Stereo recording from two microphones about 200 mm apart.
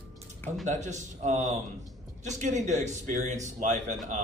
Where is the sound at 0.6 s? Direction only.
35° right (ahead or behind).